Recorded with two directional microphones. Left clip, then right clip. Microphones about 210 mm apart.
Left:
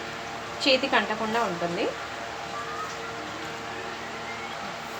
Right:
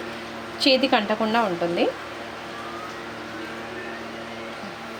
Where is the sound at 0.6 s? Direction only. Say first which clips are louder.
Right 3 dB; 45° right (ahead or behind).